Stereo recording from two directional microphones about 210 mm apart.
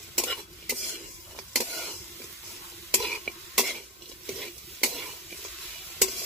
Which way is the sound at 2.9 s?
Centre (ahead or behind).